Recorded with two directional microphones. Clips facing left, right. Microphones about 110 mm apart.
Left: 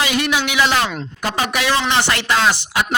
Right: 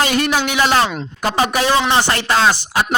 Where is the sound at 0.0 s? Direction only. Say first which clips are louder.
Right 2 dB; 45° right (ahead or behind).